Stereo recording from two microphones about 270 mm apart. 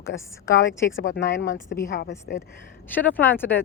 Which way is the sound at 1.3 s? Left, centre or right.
Left.